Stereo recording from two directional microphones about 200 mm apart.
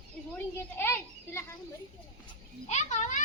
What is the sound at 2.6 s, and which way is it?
Speech, 35° left (ahead or behind).